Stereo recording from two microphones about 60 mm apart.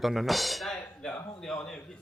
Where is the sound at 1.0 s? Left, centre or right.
Centre.